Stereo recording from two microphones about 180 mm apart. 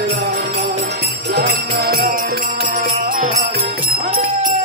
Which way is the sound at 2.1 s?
50° right (ahead or behind).